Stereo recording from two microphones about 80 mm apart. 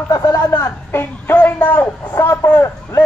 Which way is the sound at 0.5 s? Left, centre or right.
Left.